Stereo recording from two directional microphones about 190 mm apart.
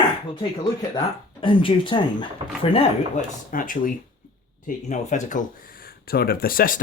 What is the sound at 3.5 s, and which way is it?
Speech, 45° left (ahead or behind).